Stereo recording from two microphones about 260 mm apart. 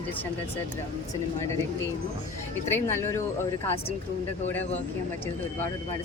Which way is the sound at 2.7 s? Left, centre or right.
Centre.